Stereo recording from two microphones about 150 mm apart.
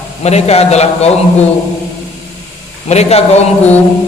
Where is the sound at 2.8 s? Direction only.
45° left (ahead or behind).